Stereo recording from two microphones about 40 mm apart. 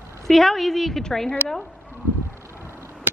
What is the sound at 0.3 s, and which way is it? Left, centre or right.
A woman's voice, centre.